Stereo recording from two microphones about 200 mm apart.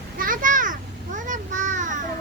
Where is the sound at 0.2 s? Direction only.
45° right (ahead or behind).